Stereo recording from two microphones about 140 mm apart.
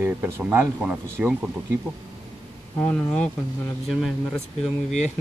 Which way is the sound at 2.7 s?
15° left (ahead or behind).